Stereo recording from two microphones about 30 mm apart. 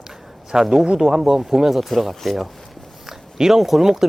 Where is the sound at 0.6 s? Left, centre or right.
Centre.